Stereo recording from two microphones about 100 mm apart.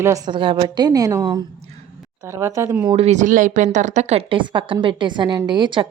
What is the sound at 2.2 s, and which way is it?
Speech, 30° right (ahead or behind).